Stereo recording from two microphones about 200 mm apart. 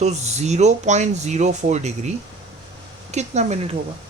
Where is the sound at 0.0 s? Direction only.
35° right (ahead or behind).